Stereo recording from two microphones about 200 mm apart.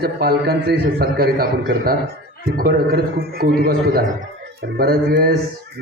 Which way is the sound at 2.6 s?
50° right (ahead or behind).